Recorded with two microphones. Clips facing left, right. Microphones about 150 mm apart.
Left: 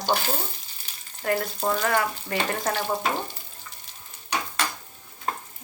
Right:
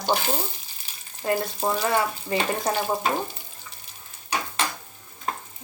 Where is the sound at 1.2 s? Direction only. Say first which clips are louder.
Right 1 dB; 20° right (ahead or behind).